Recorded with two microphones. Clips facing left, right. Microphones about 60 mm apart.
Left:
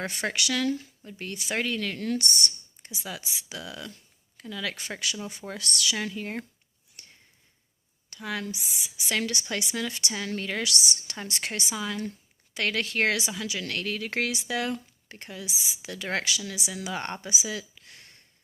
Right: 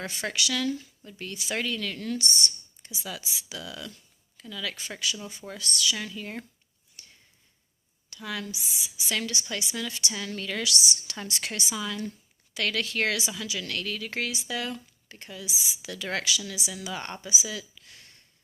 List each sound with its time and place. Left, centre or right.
0.0 s speech: left
7.0 s a sound: left
8.1 s a woman's voice: left